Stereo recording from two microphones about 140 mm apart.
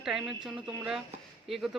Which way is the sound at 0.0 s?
5° right (ahead or behind).